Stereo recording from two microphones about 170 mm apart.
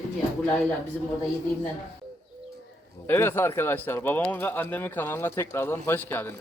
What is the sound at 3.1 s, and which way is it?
Speech, 15° left (ahead or behind).